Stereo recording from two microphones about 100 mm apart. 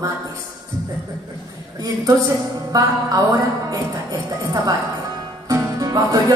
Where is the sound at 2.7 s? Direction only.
40° right (ahead or behind).